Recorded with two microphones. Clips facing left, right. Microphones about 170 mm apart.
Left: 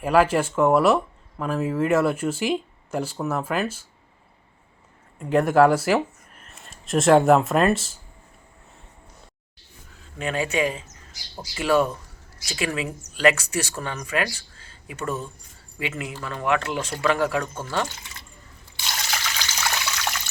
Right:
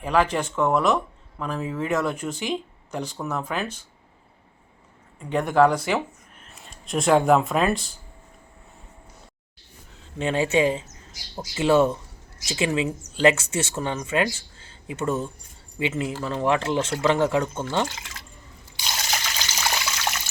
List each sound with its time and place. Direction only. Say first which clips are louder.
0.0 s speech: left 3 dB; 5° left (ahead or behind)
5.2 s speech: left 2 dB; 5° left (ahead or behind)
10.0 s speech: right 3 dB; 25° right (ahead or behind)
17.9 s speech: right 3 dB; 90° right
18.9 s water: right 1 dB; 15° right (ahead or behind)